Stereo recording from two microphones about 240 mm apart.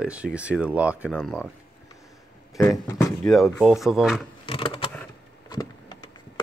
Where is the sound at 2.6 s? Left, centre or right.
Centre.